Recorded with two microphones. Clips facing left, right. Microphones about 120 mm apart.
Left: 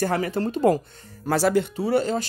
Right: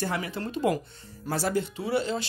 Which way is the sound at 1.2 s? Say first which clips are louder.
Left 7 dB; 90° left.